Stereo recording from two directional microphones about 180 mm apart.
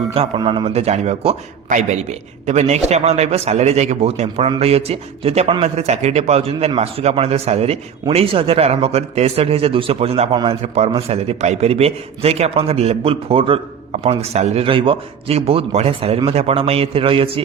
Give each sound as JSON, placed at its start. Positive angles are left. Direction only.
{"t": 0.1, "sound": "a man's voice", "side_deg": -30}
{"t": 10.6, "sound": "a man's voice", "side_deg": -35}